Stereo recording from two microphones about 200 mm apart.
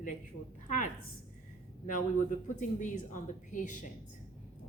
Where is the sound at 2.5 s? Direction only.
40° left (ahead or behind).